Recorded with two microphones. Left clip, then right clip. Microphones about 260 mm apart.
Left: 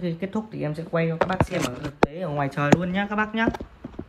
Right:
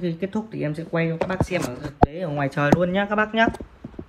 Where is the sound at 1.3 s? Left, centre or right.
Right.